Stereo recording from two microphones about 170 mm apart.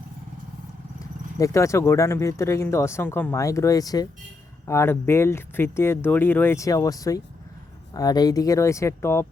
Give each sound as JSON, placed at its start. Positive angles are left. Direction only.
{"t": 1.4, "sound": "speech", "side_deg": 15}